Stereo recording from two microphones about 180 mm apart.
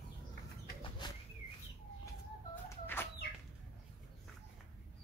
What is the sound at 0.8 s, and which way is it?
Bird, 25° left (ahead or behind).